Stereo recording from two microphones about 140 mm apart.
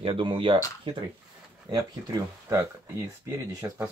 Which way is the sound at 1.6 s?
25° right (ahead or behind).